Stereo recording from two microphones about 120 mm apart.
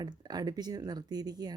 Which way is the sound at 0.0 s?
35° right (ahead or behind).